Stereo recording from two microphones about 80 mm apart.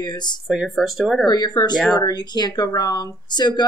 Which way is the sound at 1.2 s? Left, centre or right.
Left.